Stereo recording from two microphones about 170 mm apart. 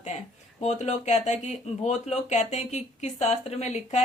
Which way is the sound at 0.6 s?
40° left (ahead or behind).